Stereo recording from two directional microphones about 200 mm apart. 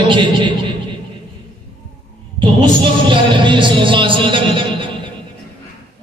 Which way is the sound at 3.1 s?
25° right (ahead or behind).